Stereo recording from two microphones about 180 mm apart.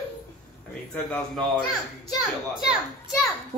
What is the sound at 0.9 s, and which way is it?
Speech, 5° left (ahead or behind).